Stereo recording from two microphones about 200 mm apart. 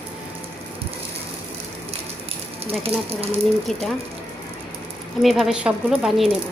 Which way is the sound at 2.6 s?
30° right (ahead or behind).